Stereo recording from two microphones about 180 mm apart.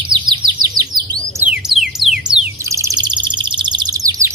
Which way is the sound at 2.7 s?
20° right (ahead or behind).